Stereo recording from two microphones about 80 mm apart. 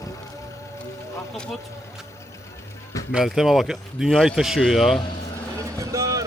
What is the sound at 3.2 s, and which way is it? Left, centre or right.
A man's voice, centre.